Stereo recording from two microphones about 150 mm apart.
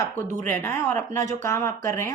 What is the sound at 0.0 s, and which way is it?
A woman's voice, 15° left (ahead or behind).